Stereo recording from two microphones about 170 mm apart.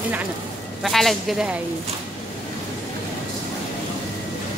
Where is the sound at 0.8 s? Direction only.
Centre (ahead or behind).